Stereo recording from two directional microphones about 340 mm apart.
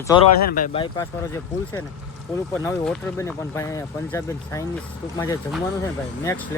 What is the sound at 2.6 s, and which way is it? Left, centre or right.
Speech, centre.